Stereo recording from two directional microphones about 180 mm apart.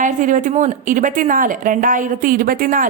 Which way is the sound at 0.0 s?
45° right (ahead or behind).